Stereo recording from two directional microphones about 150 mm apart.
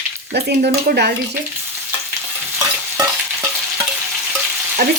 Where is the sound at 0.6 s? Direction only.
80° right.